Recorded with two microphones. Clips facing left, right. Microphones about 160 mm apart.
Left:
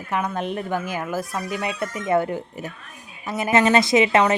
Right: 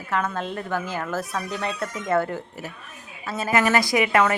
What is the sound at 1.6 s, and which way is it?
Speech, 15° left (ahead or behind).